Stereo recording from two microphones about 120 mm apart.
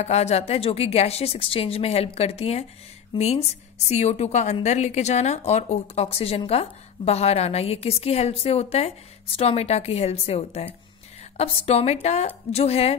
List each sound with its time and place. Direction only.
0.0 s a woman's voice: 65° left (ahead or behind)